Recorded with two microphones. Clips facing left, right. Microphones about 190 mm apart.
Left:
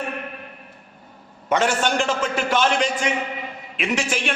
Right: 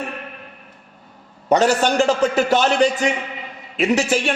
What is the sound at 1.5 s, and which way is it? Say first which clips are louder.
A man's voice: right 5 dB; 35° right (ahead or behind).